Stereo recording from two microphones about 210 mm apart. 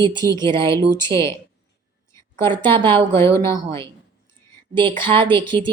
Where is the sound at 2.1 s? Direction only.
15° left (ahead or behind).